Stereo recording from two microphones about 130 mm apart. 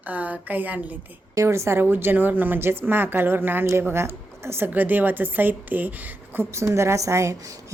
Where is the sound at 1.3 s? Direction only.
20° right (ahead or behind).